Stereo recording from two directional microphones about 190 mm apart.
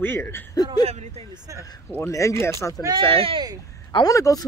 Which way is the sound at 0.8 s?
35° right (ahead or behind).